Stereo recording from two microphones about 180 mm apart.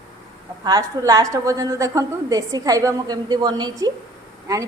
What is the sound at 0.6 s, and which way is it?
A woman's voice, 20° right (ahead or behind).